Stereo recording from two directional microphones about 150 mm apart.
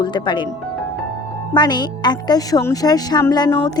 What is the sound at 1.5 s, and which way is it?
Speech, 30° left (ahead or behind).